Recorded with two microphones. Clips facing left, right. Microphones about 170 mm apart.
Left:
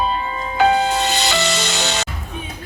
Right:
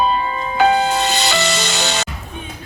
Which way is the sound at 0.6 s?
70° right (ahead or behind).